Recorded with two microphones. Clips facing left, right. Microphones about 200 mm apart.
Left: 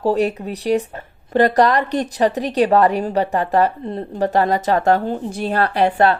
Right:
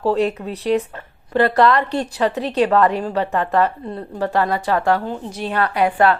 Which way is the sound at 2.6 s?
35° left (ahead or behind).